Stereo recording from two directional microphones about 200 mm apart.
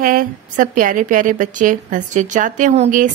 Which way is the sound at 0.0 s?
45° right (ahead or behind).